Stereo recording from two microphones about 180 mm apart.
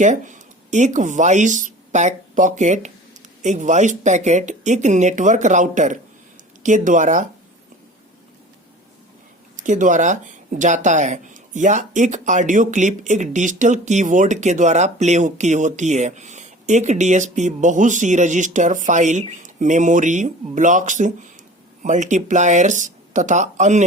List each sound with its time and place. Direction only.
0.0 s speech: 45° right (ahead or behind)
9.6 s speech: 45° right (ahead or behind)